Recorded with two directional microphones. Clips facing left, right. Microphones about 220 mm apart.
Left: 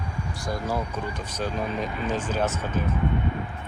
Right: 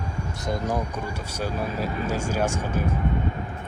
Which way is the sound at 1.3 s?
10° right (ahead or behind).